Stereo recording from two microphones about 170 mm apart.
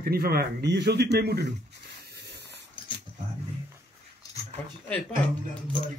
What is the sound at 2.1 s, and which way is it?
Spray, 75° right (ahead or behind).